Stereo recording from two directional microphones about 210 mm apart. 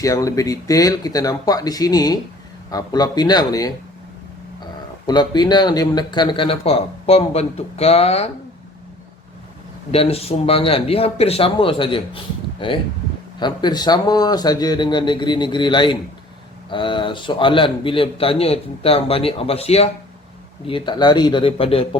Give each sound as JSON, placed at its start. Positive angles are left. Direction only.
{"t": 0.0, "sound": "speech", "side_deg": 15}
{"t": 9.9, "sound": "speech", "side_deg": 30}